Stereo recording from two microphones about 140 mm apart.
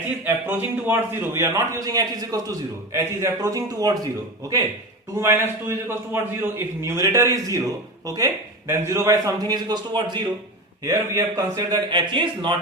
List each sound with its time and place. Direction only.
0.3 s a man's voice: 15° right (ahead or behind)
5.1 s a man's voice: 15° right (ahead or behind); by 10.2 s 30° right (ahead or behind)
10.8 s a man's voice: 20° right (ahead or behind); by 12.5 s 35° right (ahead or behind)